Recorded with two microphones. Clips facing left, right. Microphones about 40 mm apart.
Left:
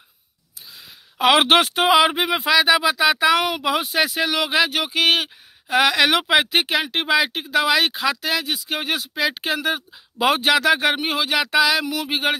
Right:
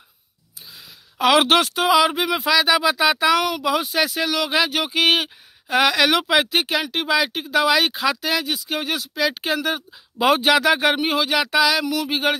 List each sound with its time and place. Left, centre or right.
1.1 s speech: centre
3.3 s speech: centre
3.8 s speech: centre